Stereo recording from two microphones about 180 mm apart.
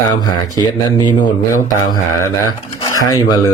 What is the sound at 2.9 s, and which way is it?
Speech, 20° left (ahead or behind).